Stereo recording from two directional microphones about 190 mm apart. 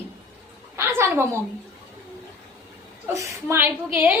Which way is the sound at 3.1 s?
15° right (ahead or behind).